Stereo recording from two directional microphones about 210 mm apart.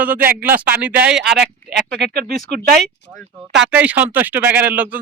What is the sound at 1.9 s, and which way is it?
Speech, 55° right (ahead or behind).